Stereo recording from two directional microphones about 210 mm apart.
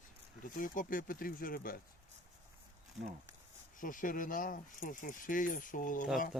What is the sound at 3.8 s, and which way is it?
Speech, 40° left (ahead or behind).